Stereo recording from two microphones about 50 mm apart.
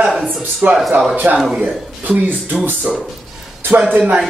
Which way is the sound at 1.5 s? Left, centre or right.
Centre.